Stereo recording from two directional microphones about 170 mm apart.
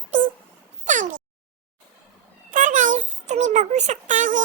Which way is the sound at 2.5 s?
50° right (ahead or behind).